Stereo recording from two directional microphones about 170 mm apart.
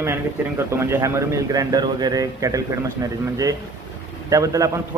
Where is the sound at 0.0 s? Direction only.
15° right (ahead or behind).